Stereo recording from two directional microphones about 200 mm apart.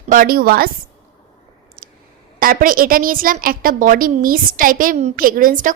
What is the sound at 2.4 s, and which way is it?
A woman's voice, 45° right (ahead or behind).